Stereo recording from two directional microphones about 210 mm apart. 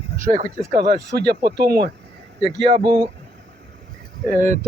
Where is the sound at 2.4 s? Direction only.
25° right (ahead or behind).